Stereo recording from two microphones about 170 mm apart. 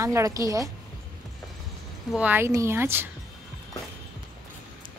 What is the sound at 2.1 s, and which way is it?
Speech, 10° right (ahead or behind).